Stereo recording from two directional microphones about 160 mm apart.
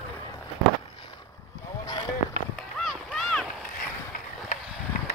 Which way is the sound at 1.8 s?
25° left (ahead or behind).